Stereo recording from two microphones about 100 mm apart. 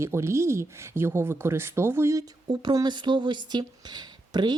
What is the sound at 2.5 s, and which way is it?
Speech, 45° right (ahead or behind).